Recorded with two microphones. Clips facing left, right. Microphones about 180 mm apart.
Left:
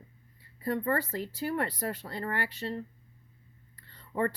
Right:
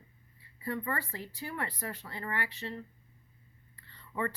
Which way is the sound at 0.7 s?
40° left (ahead or behind).